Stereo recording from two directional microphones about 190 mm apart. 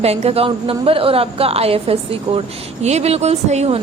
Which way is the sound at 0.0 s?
30° right (ahead or behind).